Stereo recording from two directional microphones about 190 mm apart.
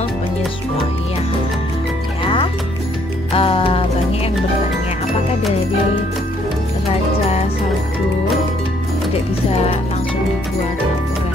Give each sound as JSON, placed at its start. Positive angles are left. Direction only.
{"t": 2.2, "sound": "music", "side_deg": 25}